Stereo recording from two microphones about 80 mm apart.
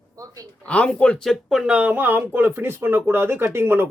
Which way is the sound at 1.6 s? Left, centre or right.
Centre.